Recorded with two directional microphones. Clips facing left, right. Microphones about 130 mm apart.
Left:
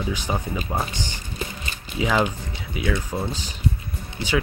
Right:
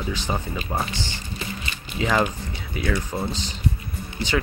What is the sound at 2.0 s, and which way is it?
Speech, 5° left (ahead or behind).